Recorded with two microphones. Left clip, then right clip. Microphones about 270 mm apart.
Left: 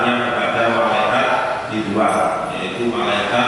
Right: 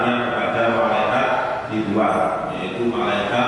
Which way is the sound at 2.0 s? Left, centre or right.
Centre.